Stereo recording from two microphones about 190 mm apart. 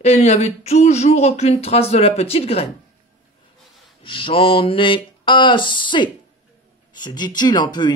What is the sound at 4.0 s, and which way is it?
Speech, 30° left (ahead or behind).